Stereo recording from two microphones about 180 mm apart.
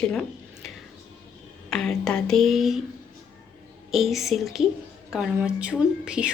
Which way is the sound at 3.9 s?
Centre (ahead or behind).